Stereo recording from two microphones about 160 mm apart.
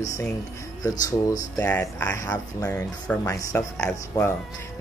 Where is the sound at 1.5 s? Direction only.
10° left (ahead or behind).